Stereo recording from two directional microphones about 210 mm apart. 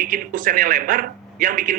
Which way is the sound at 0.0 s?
40° right (ahead or behind).